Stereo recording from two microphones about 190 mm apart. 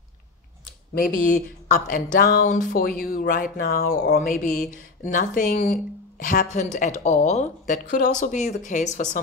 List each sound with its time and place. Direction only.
0.9 s speech: 45° left (ahead or behind)